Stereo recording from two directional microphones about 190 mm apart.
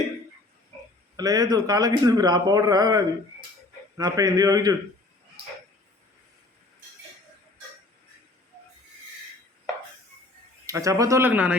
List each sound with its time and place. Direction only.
1.1 s a man's voice: 20° right (ahead or behind)
10.7 s speech: 15° right (ahead or behind)